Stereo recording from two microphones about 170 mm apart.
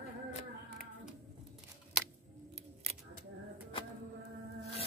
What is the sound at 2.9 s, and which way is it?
Single-lens reflex camera, 35° right (ahead or behind).